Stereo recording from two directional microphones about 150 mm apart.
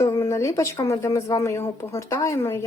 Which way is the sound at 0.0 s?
20° left (ahead or behind).